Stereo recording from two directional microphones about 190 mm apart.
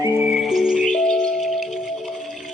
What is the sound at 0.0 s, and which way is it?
Music, 5° right (ahead or behind).